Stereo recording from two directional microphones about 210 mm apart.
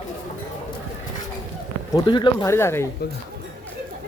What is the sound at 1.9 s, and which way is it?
Speech, 20° left (ahead or behind).